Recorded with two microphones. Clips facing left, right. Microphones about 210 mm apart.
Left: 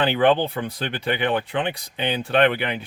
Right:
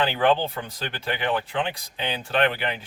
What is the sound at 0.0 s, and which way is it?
Speech, 55° left (ahead or behind).